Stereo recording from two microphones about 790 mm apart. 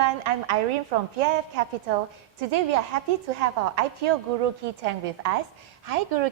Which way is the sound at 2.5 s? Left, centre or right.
Right.